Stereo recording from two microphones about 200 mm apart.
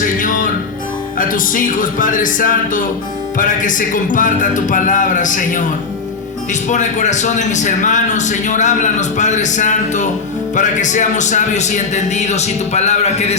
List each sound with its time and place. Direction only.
0.2 s music: 40° left (ahead or behind)
1.2 s a man's voice: 45° left (ahead or behind)